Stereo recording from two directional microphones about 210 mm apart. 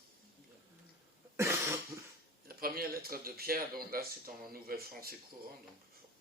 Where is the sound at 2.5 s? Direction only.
45° right (ahead or behind).